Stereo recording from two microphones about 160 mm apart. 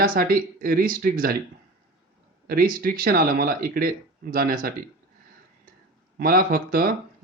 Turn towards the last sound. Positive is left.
turn(degrees=-65)  # may be behind; listen again after turning